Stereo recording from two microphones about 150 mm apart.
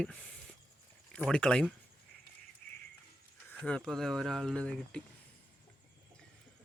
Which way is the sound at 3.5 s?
5° left (ahead or behind).